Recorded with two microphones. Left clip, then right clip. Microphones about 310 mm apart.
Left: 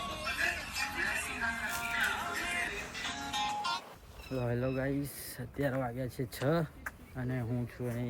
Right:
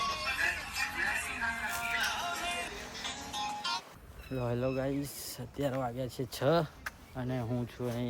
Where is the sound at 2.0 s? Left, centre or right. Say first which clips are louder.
Even; centre.